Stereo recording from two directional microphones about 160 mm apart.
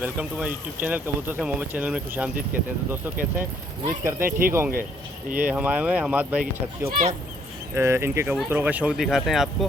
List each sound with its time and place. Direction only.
0.0 s speech: 10° right (ahead or behind)
3.8 s speech: 20° right (ahead or behind)
4.3 s speech: 65° right (ahead or behind)
5.4 s speech: 10° right (ahead or behind)
6.4 s speech: 55° right (ahead or behind)
7.8 s speech: 15° right (ahead or behind)